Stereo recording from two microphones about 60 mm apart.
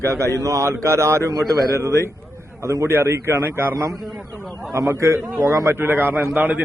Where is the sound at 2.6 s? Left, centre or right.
Right.